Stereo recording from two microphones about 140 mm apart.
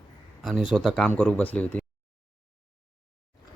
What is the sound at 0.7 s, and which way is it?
Speech, centre (ahead or behind).